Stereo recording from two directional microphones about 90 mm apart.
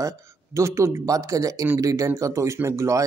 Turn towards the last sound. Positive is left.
turn(degrees=-35)  # may be behind; listen again after turning